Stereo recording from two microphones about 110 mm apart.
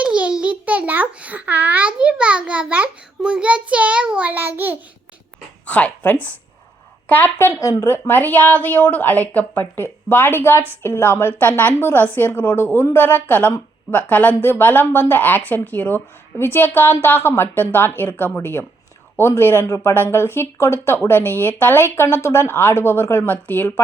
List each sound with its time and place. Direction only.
0.0 s a child's voice: 10° right (ahead or behind)
5.6 s speech: 10° left (ahead or behind)